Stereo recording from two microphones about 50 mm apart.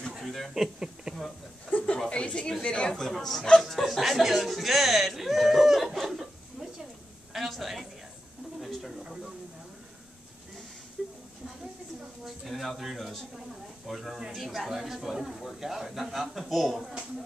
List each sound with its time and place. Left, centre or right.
0.2 s a man's voice: centre
1.1 s speech: centre
1.7 s speech: left
2.0 s speech: left
2.9 s a man's voice: centre
5.9 s chicken: centre
7.3 s a sound: centre
11.0 s a sound: centre
12.3 s a man's voice: centre